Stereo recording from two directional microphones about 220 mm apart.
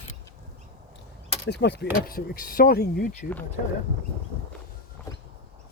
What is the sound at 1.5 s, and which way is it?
Speech, 50° left (ahead or behind).